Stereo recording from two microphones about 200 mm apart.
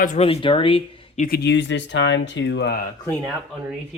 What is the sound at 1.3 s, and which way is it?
Speech, 55° left (ahead or behind).